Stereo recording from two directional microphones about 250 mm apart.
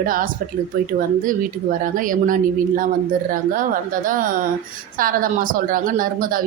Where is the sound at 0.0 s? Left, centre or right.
Right.